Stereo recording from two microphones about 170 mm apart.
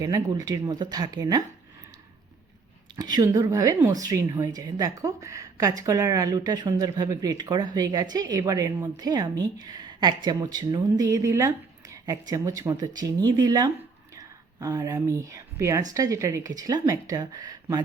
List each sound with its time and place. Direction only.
0.0 s speech: 20° right (ahead or behind)
2.9 s speech: 25° right (ahead or behind)